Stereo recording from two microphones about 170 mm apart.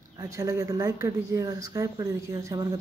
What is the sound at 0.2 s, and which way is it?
Speech, 20° right (ahead or behind).